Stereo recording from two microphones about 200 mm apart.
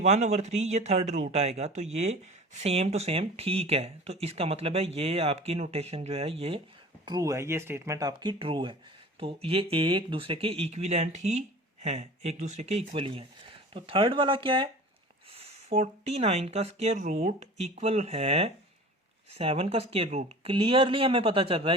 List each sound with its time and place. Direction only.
0.0 s speech: 35° right (ahead or behind)